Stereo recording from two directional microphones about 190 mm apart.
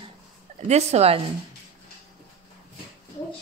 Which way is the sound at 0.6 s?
35° right (ahead or behind).